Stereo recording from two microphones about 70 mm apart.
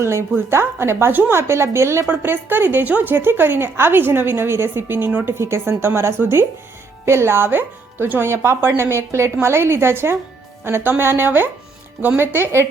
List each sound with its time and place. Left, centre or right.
0.0 s a woman's voice: right